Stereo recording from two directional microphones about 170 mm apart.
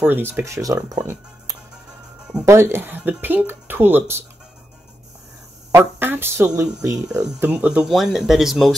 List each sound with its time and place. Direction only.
0.0 s speech: 10° right (ahead or behind)
2.4 s speech: 15° right (ahead or behind)
5.7 s speech: 15° right (ahead or behind)
7.2 s speech: 10° right (ahead or behind)